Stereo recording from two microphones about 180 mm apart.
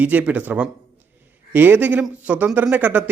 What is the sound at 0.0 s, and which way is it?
A man's voice, 10° right (ahead or behind).